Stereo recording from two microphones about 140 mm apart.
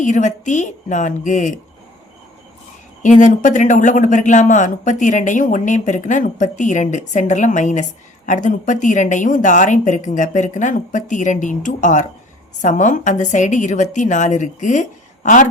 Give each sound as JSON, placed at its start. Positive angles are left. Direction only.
{"t": 0.0, "sound": "speech", "side_deg": 60}
{"t": 3.0, "sound": "speech", "side_deg": 65}